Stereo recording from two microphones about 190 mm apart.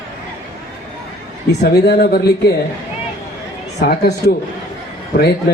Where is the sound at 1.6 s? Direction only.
60° left (ahead or behind).